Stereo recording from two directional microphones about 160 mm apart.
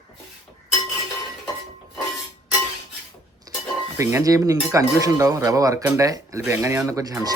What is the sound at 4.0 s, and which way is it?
Speech, 20° right (ahead or behind).